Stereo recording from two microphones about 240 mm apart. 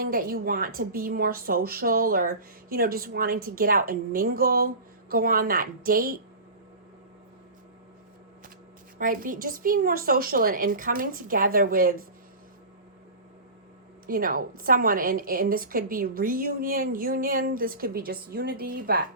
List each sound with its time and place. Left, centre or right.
0.0 s a woman's voice: right
9.0 s a woman's voice: right
14.1 s a woman's voice: right